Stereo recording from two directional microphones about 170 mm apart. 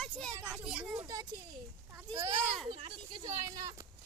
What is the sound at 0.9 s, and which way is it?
Speech, 20° right (ahead or behind).